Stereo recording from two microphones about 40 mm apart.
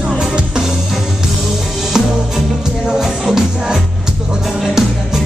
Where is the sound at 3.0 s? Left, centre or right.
Centre.